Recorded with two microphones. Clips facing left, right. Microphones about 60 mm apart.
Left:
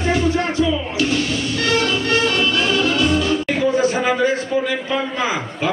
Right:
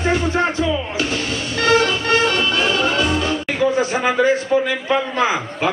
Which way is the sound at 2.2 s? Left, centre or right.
Centre.